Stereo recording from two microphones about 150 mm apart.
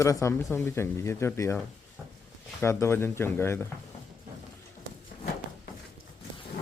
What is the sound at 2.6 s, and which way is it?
Speech, 15° left (ahead or behind).